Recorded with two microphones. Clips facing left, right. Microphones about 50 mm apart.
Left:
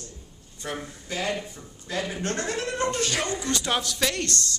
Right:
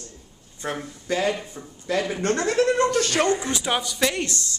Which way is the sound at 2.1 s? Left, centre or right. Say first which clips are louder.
Right 7 dB; right.